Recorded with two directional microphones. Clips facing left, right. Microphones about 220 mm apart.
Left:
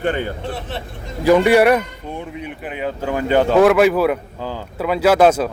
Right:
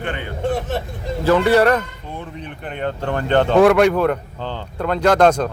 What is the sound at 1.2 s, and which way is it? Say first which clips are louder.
A man's voice: left 2 dB; 15° left (ahead or behind).